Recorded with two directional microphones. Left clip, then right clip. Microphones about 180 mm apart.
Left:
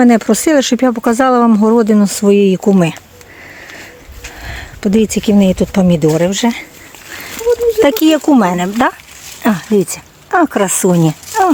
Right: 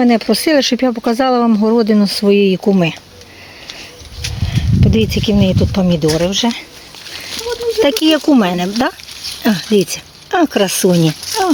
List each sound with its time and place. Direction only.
0.0 s speech: 20° left (ahead or behind)
4.4 s speech: 20° left (ahead or behind)
7.8 s speech: 15° left (ahead or behind)